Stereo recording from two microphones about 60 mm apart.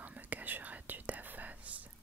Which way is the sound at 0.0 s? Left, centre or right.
Right.